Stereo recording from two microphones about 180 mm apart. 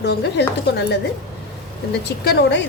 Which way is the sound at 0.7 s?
65° left (ahead or behind).